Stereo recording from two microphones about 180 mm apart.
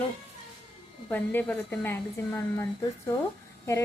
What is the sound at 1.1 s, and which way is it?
A woman's voice, 10° left (ahead or behind).